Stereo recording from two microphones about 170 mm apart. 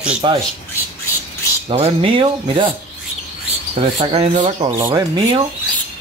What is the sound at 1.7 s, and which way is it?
Speech, 35° right (ahead or behind).